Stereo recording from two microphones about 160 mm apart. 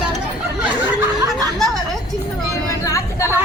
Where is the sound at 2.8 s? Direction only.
20° left (ahead or behind).